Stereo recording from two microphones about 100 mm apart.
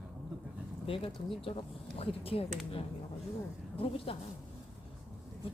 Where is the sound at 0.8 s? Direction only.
65° left (ahead or behind).